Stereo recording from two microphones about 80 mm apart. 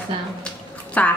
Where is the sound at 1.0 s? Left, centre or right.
Centre.